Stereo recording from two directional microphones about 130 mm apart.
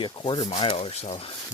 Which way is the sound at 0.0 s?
40° left (ahead or behind).